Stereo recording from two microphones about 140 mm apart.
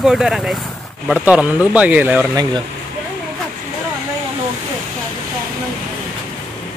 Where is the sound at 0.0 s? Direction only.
5° right (ahead or behind).